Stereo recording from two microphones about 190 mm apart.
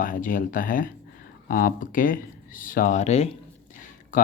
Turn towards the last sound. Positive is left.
turn(degrees=45)  # may be behind; listen again after turning